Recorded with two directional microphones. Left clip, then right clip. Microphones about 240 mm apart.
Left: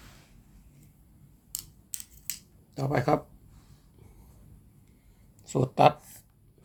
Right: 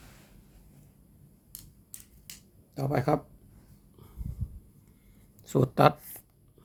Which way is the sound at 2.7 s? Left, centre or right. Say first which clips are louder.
Left 2 dB; centre.